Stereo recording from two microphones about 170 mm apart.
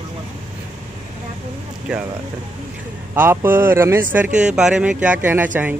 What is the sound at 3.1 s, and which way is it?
Speech, 10° right (ahead or behind).